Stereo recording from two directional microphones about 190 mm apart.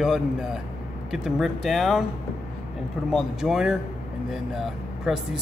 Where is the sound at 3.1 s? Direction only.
Centre (ahead or behind).